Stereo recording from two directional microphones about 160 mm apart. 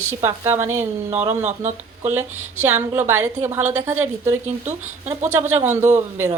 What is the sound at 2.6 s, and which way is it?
A woman's voice, 15° right (ahead or behind).